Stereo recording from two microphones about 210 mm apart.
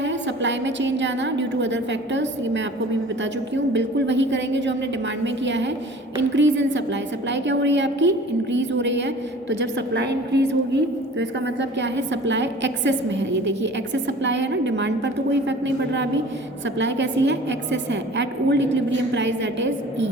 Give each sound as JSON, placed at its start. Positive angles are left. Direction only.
{"t": 0.0, "sound": "a woman's voice", "side_deg": -60}
{"t": 3.7, "sound": "a woman's voice", "side_deg": -60}